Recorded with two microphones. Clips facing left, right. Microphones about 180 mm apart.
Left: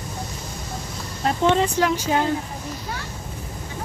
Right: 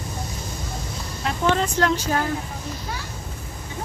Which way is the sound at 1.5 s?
15° left (ahead or behind).